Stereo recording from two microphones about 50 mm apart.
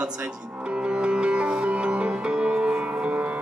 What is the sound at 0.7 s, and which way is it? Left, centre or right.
Music, centre.